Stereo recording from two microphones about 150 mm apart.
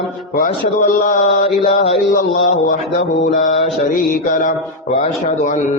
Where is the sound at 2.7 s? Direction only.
65° left (ahead or behind).